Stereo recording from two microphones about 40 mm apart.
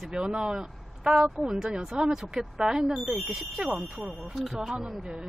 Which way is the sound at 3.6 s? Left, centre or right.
Right.